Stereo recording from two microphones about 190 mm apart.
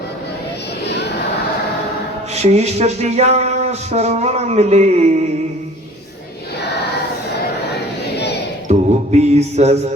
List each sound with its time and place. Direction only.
2.3 s speech: 35° right (ahead or behind)
8.6 s mantra: 35° right (ahead or behind)